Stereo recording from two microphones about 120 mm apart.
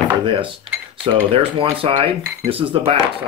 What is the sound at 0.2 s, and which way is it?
Speech, 45° right (ahead or behind).